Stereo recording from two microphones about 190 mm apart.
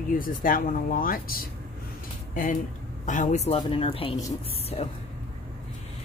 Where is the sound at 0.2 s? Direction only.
45° left (ahead or behind).